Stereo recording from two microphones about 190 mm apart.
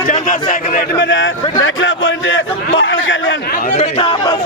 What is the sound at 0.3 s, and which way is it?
Speech, 45° left (ahead or behind).